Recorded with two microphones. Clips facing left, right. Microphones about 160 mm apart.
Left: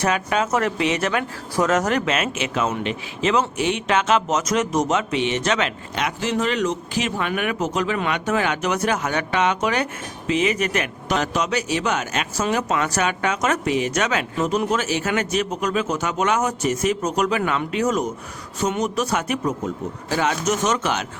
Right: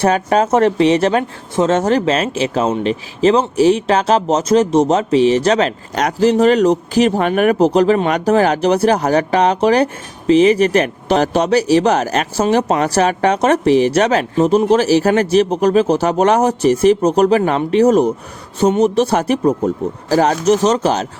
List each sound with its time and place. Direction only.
0.0 s speech: 35° right (ahead or behind)